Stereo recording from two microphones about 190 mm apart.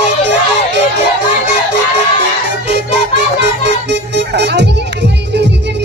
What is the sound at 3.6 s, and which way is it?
Music, 65° right (ahead or behind).